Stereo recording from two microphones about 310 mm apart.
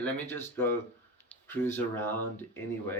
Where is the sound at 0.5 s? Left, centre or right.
Centre.